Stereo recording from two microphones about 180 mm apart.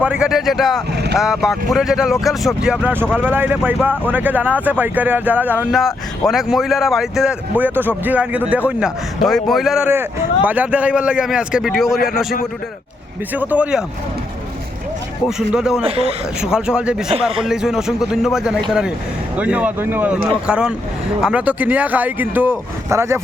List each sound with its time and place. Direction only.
0.0 s a man's voice: 5° right (ahead or behind)
11.9 s a man's voice: 55° left (ahead or behind)
13.3 s a man's voice: 10° right (ahead or behind)
15.3 s speech: 5° right (ahead or behind)
15.8 s a man's voice: 35° right (ahead or behind)
16.4 s a man's voice: 5° right (ahead or behind)